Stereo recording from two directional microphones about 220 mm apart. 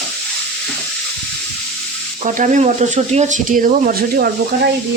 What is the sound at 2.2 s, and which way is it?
Speech, 35° right (ahead or behind).